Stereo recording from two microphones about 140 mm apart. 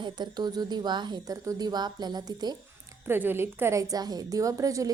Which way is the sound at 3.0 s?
15° right (ahead or behind).